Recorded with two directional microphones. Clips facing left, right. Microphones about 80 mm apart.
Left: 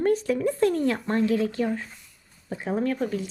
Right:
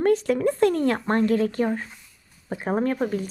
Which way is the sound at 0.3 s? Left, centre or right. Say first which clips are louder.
Right 2 dB; right.